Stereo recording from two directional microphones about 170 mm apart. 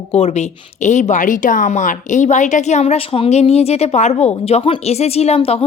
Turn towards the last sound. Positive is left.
turn(degrees=35)  # may be behind; listen again after turning